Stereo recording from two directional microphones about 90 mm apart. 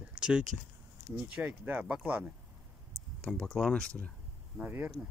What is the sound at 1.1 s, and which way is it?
Speech, 15° right (ahead or behind).